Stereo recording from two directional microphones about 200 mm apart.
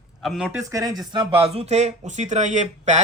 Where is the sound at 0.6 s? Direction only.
15° right (ahead or behind).